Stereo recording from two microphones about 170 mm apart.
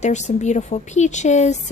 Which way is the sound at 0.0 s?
45° left (ahead or behind).